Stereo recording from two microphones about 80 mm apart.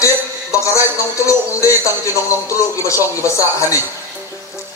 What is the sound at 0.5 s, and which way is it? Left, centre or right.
Speech, left.